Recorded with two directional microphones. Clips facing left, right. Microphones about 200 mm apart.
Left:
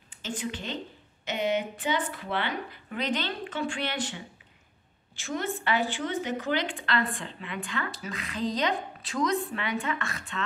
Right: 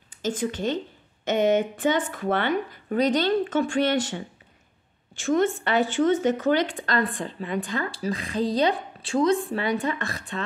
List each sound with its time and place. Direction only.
0.1 s speech: 40° right (ahead or behind)